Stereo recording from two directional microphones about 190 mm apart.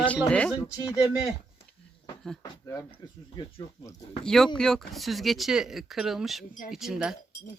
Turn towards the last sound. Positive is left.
turn(degrees=-5)  # may be behind; listen again after turning